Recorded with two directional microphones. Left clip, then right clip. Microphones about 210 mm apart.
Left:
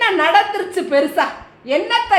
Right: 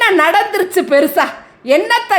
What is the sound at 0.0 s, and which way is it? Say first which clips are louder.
A woman's voice: right 3 dB; 50° right (ahead or behind).